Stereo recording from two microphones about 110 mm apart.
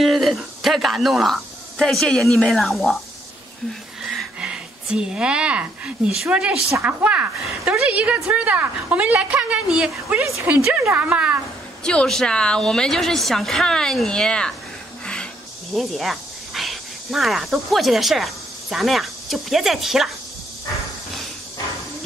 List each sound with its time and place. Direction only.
0.0 s speech: centre (ahead or behind)
4.1 s a woman's voice: 5° right (ahead or behind)
10.2 s speech: 25° right (ahead or behind)
10.5 s a woman's voice: 15° right (ahead or behind)
11.8 s a woman's voice: 10° left (ahead or behind)
15.7 s speech: centre (ahead or behind)